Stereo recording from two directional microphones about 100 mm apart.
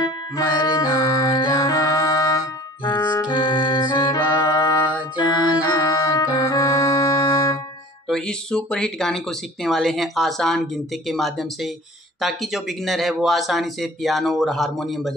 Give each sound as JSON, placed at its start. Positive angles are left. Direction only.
{"t": 0.6, "sound": "music", "side_deg": 40}
{"t": 2.8, "sound": "music", "side_deg": 50}
{"t": 8.1, "sound": "speech", "side_deg": 10}